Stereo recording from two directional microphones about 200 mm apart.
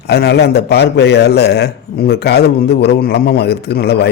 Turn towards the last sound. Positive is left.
turn(degrees=55)  # may be behind; listen again after turning